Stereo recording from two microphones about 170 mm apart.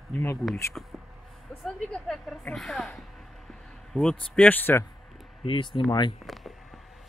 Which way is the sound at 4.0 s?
5° left (ahead or behind).